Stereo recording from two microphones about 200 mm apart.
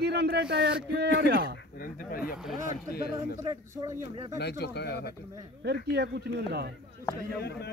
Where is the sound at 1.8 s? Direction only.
45° left (ahead or behind).